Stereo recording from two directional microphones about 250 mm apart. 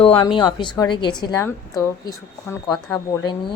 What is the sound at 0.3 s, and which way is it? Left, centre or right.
A woman's voice, centre.